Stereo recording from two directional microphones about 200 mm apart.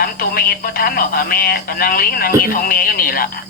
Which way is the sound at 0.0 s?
50° left (ahead or behind).